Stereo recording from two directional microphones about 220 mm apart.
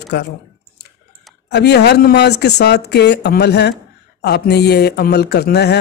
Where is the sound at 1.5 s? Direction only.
50° left (ahead or behind).